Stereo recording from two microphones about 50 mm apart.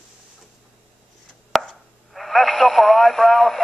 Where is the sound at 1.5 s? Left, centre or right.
Centre.